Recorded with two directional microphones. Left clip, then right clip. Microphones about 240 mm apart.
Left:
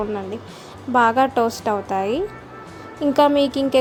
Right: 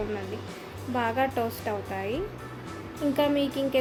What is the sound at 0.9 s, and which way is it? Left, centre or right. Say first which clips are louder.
A woman's voice: left 11 dB; left.